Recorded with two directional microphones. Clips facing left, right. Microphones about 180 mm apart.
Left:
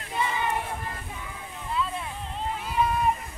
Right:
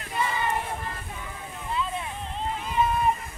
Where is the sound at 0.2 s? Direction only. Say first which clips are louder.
Even; 15° left (ahead or behind).